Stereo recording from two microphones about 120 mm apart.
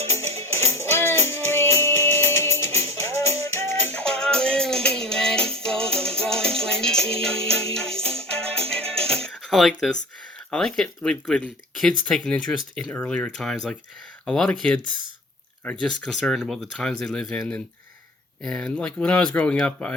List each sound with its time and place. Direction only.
0.0 s music: 60° right (ahead or behind)
0.5 s music: 20° left (ahead or behind)
3.8 s music: 10° left (ahead or behind)
8.0 s music: 55° right (ahead or behind)
9.0 s a sound: 5° left (ahead or behind)
10.5 s speech: 5° left (ahead or behind)